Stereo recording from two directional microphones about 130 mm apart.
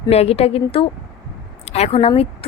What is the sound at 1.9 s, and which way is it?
Speech, 50° left (ahead or behind).